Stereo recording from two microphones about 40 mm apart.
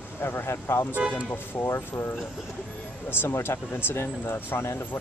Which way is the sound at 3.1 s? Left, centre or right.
Left.